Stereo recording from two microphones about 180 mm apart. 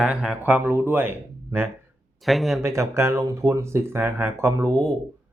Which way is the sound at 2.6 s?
15° right (ahead or behind).